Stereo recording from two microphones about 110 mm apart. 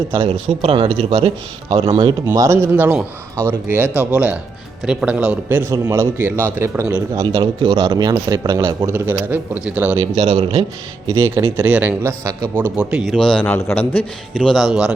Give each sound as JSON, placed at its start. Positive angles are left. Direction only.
{"t": 0.1, "sound": "speech", "side_deg": -55}
{"t": 2.3, "sound": "a man's voice", "side_deg": -25}
{"t": 4.1, "sound": "a man's voice", "side_deg": -10}
{"t": 7.2, "sound": "a man's voice", "side_deg": -40}
{"t": 8.9, "sound": "a man's voice", "side_deg": -20}
{"t": 10.2, "sound": "speech", "side_deg": -70}
{"t": 11.1, "sound": "a man's voice", "side_deg": -30}
{"t": 11.5, "sound": "a man's voice", "side_deg": -15}
{"t": 12.2, "sound": "a man's voice", "side_deg": -30}
{"t": 12.6, "sound": "speech", "side_deg": -10}
{"t": 13.4, "sound": "a man's voice", "side_deg": 20}